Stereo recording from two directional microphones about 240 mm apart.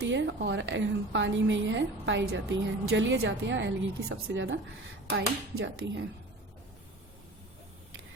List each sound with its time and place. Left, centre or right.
0.0 s a woman's voice: right